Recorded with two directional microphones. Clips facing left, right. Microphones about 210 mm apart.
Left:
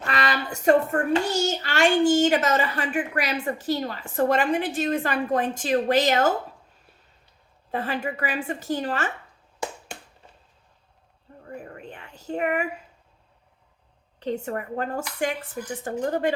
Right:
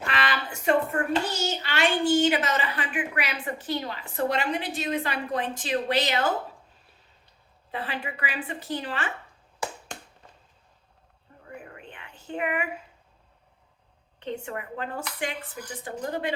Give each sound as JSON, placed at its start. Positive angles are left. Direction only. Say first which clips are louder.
{"t": 0.1, "sound": "a child's voice", "louder": "left 4 dB", "side_deg": 40}
{"t": 7.7, "sound": "a child's voice", "louder": "left 6 dB", "side_deg": 45}
{"t": 11.4, "sound": "a sound", "louder": "left 5 dB", "side_deg": 40}
{"t": 14.2, "sound": "a child's voice", "louder": "left 5 dB", "side_deg": 40}